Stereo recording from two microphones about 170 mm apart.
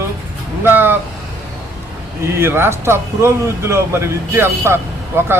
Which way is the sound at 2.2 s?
15° right (ahead or behind).